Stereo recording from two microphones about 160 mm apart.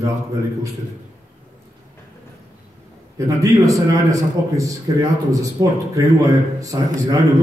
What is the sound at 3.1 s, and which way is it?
A man's voice, 20° right (ahead or behind).